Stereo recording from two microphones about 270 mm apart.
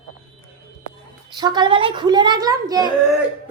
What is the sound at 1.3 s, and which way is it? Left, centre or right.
A woman's voice, centre.